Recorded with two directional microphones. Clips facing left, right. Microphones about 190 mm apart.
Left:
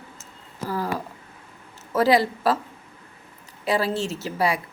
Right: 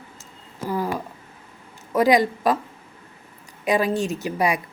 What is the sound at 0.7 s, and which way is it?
A woman's voice, 15° right (ahead or behind).